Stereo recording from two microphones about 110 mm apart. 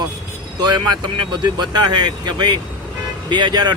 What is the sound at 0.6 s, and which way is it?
Speech, 40° right (ahead or behind).